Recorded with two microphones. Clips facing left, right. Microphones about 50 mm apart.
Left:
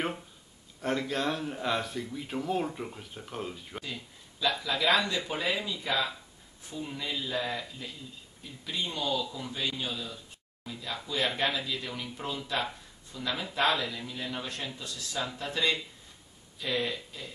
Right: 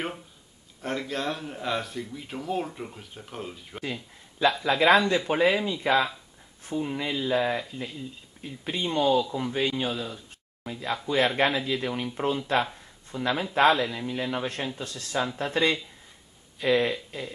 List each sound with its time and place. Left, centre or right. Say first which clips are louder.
0.7 s speech: even; centre
3.8 s a sound: right 6 dB; right
4.6 s speech: right 7 dB; right